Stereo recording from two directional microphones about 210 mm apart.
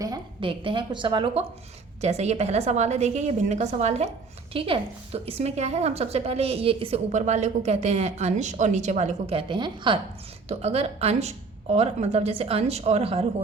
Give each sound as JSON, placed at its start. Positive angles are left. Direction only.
{"t": 0.0, "sound": "a woman's voice", "side_deg": -20}